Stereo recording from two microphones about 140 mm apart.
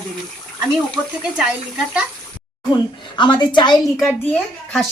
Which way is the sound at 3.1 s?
35° left (ahead or behind).